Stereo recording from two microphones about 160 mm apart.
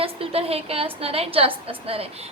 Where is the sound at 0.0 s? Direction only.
35° right (ahead or behind).